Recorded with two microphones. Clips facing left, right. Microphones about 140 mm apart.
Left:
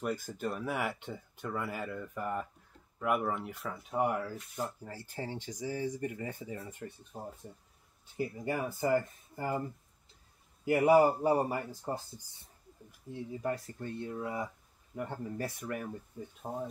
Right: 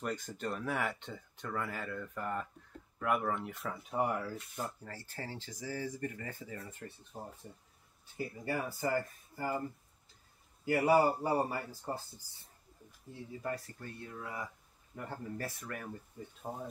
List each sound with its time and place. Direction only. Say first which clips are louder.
0.0 s speech: left 3 dB; 5° left (ahead or behind)
8.5 s speech: left 4 dB; 20° left (ahead or behind)
10.6 s speech: left 4 dB; 20° left (ahead or behind)
13.1 s speech: left 4 dB; 20° left (ahead or behind)